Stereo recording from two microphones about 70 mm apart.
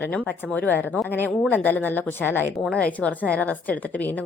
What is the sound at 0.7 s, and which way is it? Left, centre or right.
A woman's voice, left.